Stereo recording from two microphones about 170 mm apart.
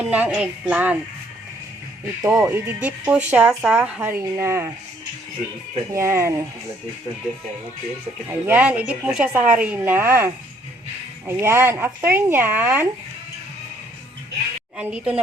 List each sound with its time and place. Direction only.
0.0 s speech: 10° right (ahead or behind)
2.4 s speech: 10° right (ahead or behind)
5.9 s speech: 15° right (ahead or behind)
8.3 s speech: 10° right (ahead or behind)
14.8 s speech: 10° right (ahead or behind)